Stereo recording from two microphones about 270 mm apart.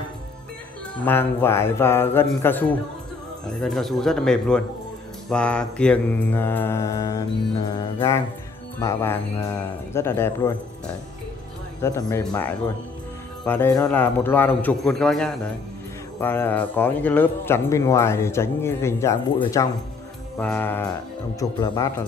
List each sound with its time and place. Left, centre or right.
1.0 s speech: centre
11.8 s speech: centre